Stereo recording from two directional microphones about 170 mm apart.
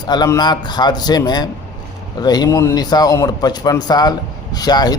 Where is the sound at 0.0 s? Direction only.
25° left (ahead or behind).